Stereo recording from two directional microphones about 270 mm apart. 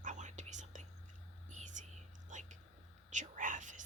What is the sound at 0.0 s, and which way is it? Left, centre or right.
Whispering, right.